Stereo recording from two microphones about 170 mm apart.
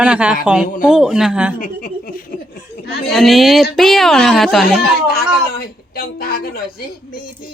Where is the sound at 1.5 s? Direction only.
60° left (ahead or behind).